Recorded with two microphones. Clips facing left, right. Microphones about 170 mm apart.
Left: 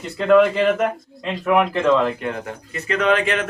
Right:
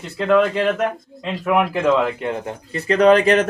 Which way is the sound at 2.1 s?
25° right (ahead or behind).